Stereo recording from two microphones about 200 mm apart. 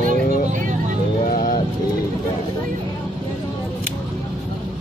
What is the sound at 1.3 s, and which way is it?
Speech, 45° left (ahead or behind).